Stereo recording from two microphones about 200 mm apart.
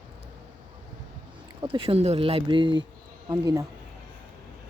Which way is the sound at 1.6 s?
25° right (ahead or behind).